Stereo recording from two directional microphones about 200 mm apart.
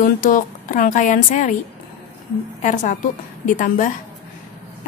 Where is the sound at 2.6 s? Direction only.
40° left (ahead or behind).